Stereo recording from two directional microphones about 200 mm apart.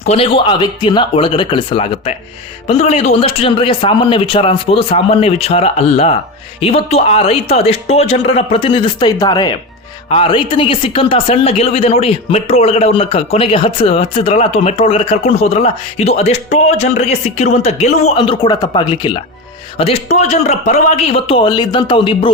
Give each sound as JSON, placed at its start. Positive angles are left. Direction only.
{"t": 0.0, "sound": "a man's voice", "side_deg": 30}